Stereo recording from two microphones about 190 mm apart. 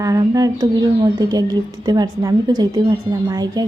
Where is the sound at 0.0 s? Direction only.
20° right (ahead or behind).